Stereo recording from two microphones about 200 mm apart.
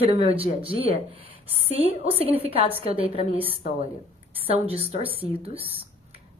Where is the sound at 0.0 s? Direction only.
30° right (ahead or behind).